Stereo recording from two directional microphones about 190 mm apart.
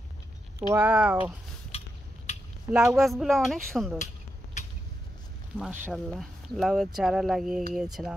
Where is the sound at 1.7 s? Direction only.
30° left (ahead or behind).